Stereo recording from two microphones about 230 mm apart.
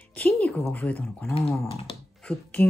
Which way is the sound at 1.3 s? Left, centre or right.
Left.